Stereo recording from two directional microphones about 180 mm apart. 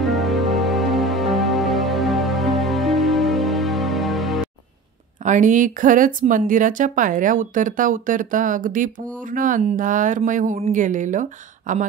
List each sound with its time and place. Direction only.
0.0 s music: centre (ahead or behind)
5.2 s speech: 45° right (ahead or behind)